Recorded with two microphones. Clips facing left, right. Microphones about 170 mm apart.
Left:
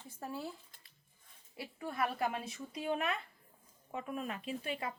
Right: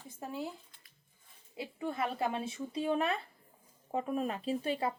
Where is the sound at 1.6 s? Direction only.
25° right (ahead or behind).